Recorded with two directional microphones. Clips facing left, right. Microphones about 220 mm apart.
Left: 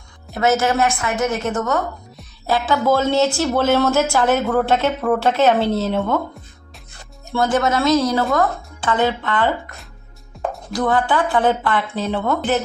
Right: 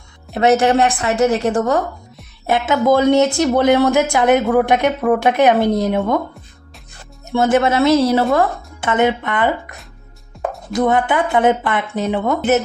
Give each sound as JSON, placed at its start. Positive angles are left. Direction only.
{"t": 0.5, "sound": "a woman's voice", "side_deg": -30}
{"t": 2.5, "sound": "a woman's voice", "side_deg": -20}
{"t": 7.3, "sound": "a woman's voice", "side_deg": -20}
{"t": 10.3, "sound": "music", "side_deg": 0}
{"t": 10.7, "sound": "a woman's voice", "side_deg": -20}